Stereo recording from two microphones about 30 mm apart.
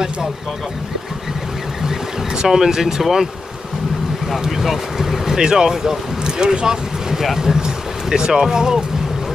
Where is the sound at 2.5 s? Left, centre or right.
Centre.